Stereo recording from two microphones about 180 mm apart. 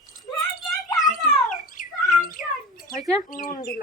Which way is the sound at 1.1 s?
50° left (ahead or behind).